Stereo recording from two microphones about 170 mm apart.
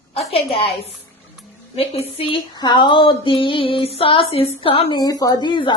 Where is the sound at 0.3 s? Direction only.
35° left (ahead or behind).